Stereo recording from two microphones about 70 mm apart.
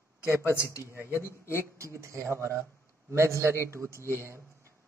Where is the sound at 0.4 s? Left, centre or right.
Left.